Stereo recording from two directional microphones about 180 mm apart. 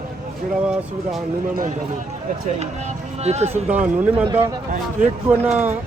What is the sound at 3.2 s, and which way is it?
Speech, 35° right (ahead or behind).